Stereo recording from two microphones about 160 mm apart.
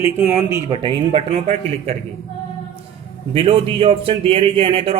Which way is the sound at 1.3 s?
40° right (ahead or behind).